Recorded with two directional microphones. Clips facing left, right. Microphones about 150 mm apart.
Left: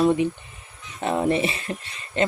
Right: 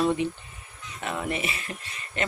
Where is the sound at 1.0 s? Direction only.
30° left (ahead or behind).